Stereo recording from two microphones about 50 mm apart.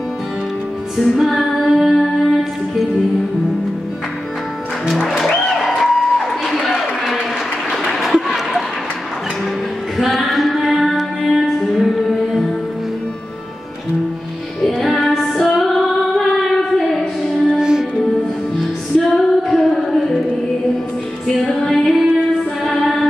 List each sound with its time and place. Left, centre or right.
0.9 s music: centre
5.5 s music: centre
6.4 s a sound: centre
9.9 s music: centre
14.7 s music: centre
15.5 s female singing: centre
17.0 s music: centre
18.9 s female singing: centre
21.5 s music: centre